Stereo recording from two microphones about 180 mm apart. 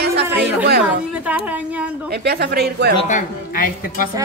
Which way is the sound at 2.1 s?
65° right (ahead or behind).